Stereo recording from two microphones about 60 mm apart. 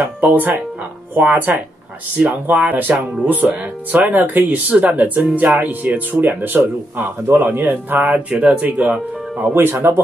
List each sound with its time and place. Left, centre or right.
0.0 s speech: right